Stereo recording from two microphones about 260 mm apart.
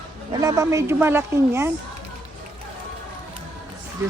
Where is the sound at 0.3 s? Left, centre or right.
Centre.